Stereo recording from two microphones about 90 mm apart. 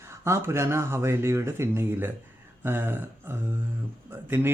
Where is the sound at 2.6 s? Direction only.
25° right (ahead or behind).